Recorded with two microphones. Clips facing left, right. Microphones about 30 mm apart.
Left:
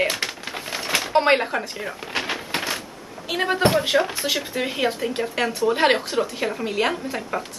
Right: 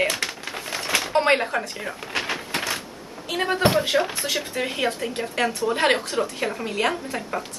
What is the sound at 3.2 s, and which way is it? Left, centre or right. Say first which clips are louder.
A woman's voice: left 1 dB; centre.